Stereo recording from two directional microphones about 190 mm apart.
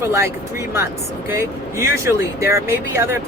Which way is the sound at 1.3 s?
15° right (ahead or behind).